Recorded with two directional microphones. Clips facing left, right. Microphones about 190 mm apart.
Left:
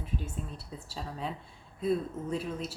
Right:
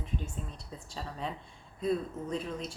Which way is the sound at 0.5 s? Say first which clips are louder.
Left 1 dB; 5° left (ahead or behind).